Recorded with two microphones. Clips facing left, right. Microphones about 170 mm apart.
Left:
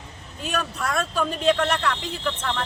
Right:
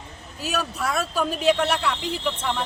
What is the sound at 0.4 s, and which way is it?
Speech, 5° right (ahead or behind).